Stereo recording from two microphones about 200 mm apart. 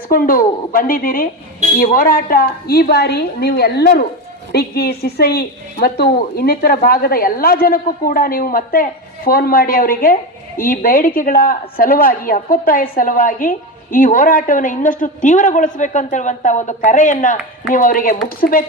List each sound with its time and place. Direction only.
0.1 s a woman's voice: 45° left (ahead or behind)